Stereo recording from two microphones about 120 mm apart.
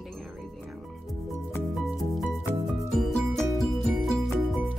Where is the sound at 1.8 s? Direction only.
5° right (ahead or behind).